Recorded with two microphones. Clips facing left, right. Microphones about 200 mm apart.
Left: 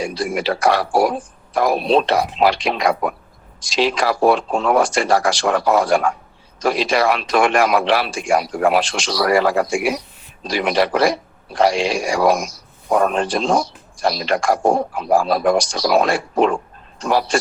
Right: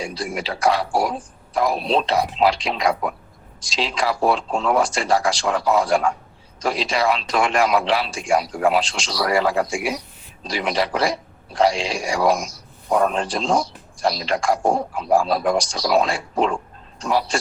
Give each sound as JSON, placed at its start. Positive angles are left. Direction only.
{"t": 0.3, "sound": "speech", "side_deg": 75}
{"t": 12.9, "sound": "a man's voice", "side_deg": 60}